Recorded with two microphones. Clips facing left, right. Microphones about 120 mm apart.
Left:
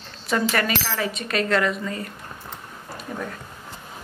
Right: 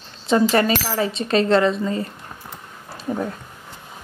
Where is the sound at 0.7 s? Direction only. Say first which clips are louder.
Right 5 dB; 15° right (ahead or behind).